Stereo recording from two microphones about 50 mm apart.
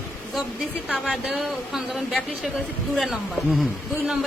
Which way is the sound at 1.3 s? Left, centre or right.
Centre.